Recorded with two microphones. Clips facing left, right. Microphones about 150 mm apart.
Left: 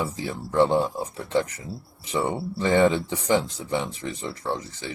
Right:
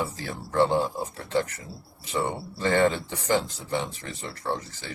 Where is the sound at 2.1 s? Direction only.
20° left (ahead or behind).